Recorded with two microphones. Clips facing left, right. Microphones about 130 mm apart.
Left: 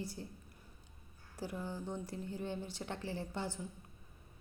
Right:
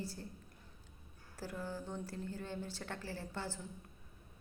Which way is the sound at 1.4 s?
15° left (ahead or behind).